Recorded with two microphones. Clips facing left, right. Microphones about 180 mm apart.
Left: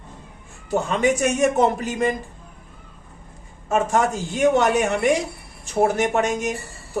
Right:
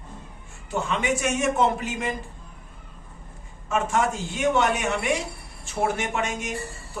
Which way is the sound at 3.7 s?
40° left (ahead or behind).